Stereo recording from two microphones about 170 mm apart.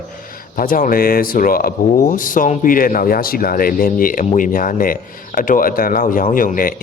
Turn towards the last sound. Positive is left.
turn(degrees=55)  # may be behind; listen again after turning